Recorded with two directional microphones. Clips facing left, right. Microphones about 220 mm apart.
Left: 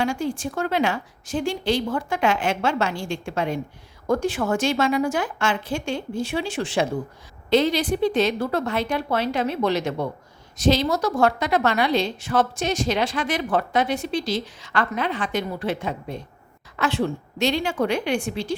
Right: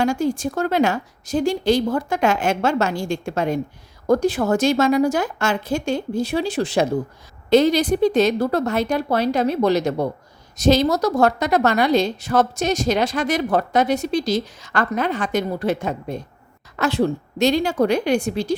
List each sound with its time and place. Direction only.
0.0 s a woman's voice: 40° right (ahead or behind)